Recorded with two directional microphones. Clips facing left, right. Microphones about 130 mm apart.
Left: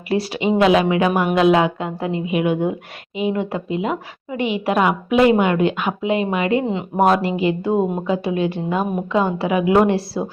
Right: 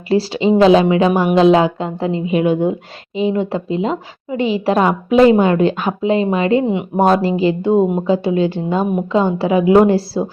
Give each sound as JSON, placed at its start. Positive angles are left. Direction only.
{"t": 0.1, "sound": "a woman's voice", "side_deg": -30}